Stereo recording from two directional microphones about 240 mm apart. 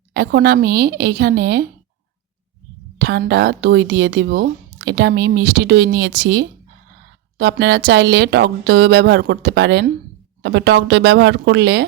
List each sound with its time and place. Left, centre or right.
0.1 s speech: right
3.0 s speech: right